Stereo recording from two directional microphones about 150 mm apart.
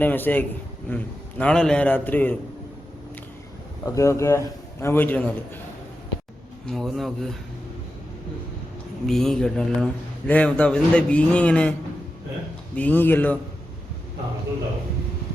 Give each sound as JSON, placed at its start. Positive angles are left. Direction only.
{"t": 0.0, "sound": "a man's voice", "side_deg": 10}
{"t": 3.8, "sound": "a man's voice", "side_deg": 20}
{"t": 6.7, "sound": "speech", "side_deg": 0}
{"t": 9.0, "sound": "a man's voice", "side_deg": 0}
{"t": 12.7, "sound": "a man's voice", "side_deg": 10}